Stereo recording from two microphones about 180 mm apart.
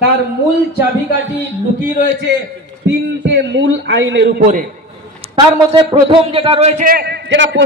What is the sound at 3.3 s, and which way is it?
A man's voice, 85° right.